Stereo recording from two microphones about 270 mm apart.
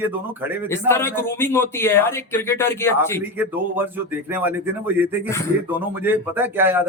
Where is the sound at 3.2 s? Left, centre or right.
Centre.